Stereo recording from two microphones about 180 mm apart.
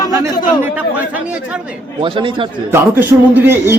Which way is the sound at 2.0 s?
30° right (ahead or behind).